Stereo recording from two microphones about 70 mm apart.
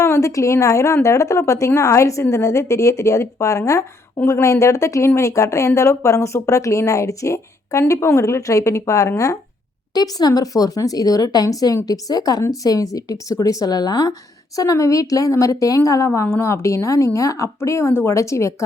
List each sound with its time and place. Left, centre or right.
0.0 s speech: left
9.9 s a woman's voice: left
12.5 s speech: left
16.2 s speech: left